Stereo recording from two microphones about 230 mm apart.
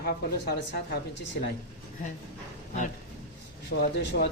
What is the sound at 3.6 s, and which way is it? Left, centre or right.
Speech, left.